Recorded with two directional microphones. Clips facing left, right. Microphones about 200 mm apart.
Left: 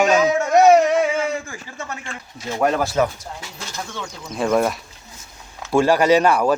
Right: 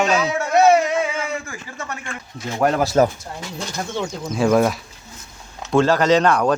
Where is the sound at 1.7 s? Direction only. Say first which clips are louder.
Even; 20° left (ahead or behind).